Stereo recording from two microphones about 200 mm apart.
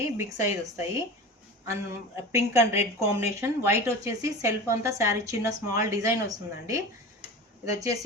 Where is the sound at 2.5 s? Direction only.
15° right (ahead or behind).